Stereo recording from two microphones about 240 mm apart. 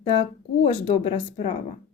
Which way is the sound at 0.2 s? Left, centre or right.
Left.